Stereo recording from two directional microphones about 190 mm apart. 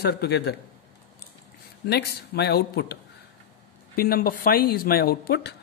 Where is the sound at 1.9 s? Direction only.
60° left (ahead or behind).